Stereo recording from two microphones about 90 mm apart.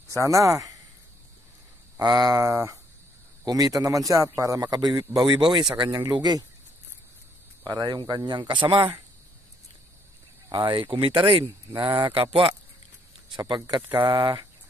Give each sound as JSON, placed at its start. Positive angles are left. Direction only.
{"t": 0.1, "sound": "a man's voice", "side_deg": -35}
{"t": 2.0, "sound": "a man's voice", "side_deg": -45}
{"t": 5.3, "sound": "speech", "side_deg": -60}
{"t": 7.6, "sound": "speech", "side_deg": -50}
{"t": 10.5, "sound": "speech", "side_deg": -65}
{"t": 11.7, "sound": "speech", "side_deg": -50}
{"t": 12.1, "sound": "speech", "side_deg": -85}
{"t": 13.7, "sound": "speech", "side_deg": -55}